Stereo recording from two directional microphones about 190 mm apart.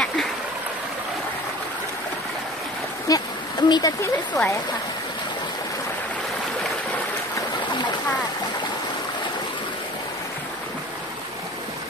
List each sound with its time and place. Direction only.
3.1 s speech: 20° left (ahead or behind)